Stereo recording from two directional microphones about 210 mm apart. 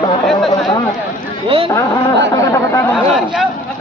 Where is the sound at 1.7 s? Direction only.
20° left (ahead or behind).